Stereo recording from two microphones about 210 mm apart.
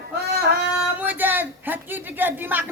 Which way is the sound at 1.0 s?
10° right (ahead or behind).